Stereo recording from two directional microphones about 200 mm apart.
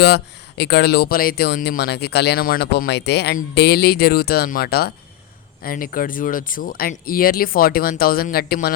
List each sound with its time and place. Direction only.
0.0 s speech: 55° left (ahead or behind)